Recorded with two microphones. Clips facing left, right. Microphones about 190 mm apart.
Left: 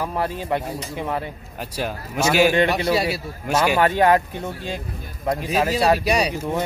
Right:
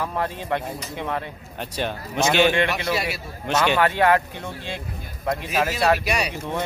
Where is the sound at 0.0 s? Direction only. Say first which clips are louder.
Left 2 dB; 10° left (ahead or behind).